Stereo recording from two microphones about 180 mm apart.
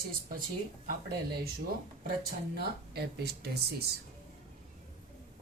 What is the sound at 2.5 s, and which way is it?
Speech, 60° right (ahead or behind).